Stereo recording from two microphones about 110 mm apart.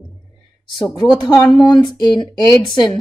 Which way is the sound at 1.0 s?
40° left (ahead or behind).